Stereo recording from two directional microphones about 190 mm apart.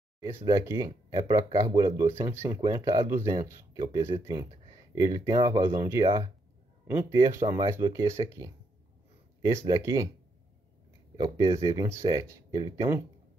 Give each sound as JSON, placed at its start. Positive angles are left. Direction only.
{"t": 0.6, "sound": "speech", "side_deg": -15}
{"t": 7.2, "sound": "speech", "side_deg": -20}
{"t": 11.1, "sound": "speech", "side_deg": -25}